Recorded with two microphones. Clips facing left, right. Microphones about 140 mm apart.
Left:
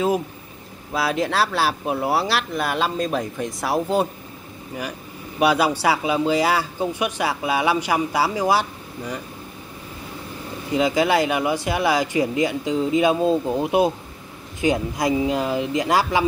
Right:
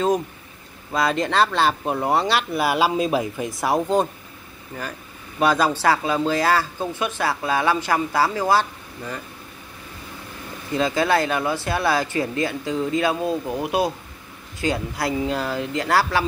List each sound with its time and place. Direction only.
0.9 s speech: 5° left (ahead or behind)
5.4 s speech: 10° left (ahead or behind)
10.7 s speech: 15° left (ahead or behind)